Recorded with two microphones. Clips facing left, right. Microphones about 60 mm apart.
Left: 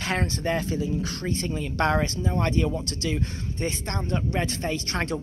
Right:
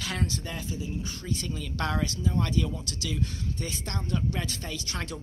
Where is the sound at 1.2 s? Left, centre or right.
Left.